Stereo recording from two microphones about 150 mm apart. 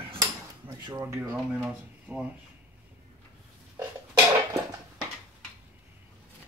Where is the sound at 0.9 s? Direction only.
15° right (ahead or behind).